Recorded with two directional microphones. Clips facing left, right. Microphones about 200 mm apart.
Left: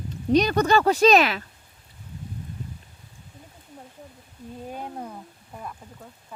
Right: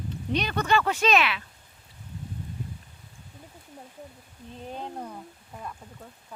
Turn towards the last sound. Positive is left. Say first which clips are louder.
# left 1 dB
turn(degrees=5)  # may be behind; listen again after turning